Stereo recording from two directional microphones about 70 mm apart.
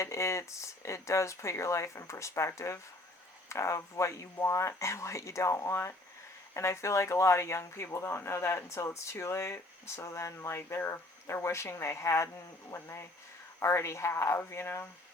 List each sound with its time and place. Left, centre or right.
0.0 s speech: left